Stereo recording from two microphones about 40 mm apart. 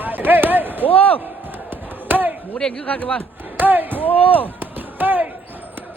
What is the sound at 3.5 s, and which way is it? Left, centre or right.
Chop, right.